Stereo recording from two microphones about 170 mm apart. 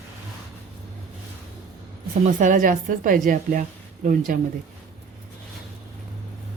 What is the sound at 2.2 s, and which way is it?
A woman's voice, 50° right (ahead or behind).